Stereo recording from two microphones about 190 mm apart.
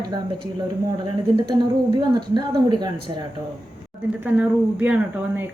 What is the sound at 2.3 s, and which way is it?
Speech, 25° right (ahead or behind).